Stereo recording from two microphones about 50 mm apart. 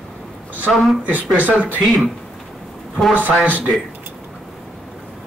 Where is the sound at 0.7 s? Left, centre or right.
Centre.